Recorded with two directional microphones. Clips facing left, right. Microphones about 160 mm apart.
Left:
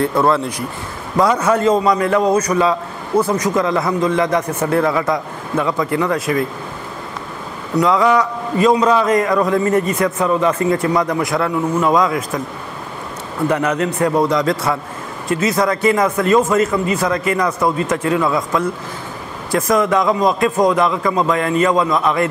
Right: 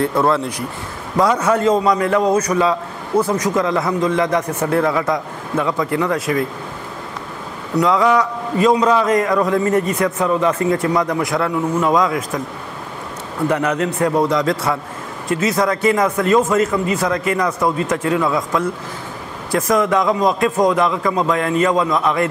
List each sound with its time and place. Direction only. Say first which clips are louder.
0.1 s a man's voice: left 1 dB; 25° left (ahead or behind)
7.8 s a man's voice: left 1 dB; 15° left (ahead or behind)
13.5 s a man's voice: left 1 dB; 15° left (ahead or behind)